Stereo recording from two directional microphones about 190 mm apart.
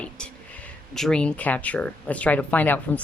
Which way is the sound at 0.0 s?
5° left (ahead or behind).